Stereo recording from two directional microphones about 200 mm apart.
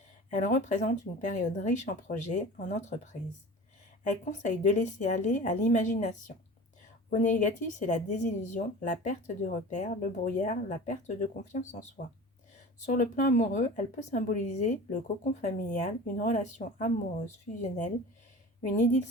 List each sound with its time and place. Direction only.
0.3 s speech: 40° left (ahead or behind)